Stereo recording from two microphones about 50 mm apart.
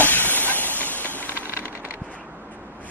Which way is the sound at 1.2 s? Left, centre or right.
Right.